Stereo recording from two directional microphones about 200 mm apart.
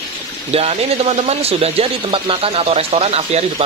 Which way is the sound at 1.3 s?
30° right (ahead or behind).